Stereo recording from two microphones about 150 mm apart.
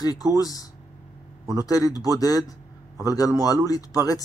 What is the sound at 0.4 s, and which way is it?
Speech, 25° left (ahead or behind).